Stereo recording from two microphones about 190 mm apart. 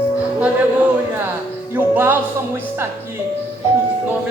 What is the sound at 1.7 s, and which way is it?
Music, 10° right (ahead or behind).